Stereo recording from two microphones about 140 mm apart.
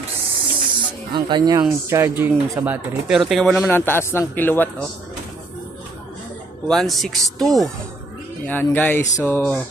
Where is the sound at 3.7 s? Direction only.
15° left (ahead or behind).